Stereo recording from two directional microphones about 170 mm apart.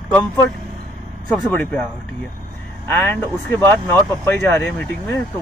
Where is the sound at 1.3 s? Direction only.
Centre (ahead or behind).